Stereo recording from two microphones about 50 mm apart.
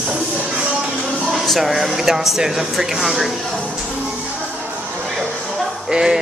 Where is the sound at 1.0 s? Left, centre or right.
Centre.